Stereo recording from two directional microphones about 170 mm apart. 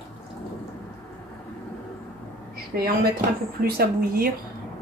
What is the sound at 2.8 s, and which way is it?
Speech, 60° right (ahead or behind).